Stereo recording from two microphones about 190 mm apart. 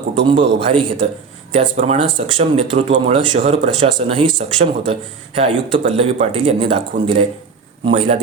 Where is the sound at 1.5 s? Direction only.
40° right (ahead or behind).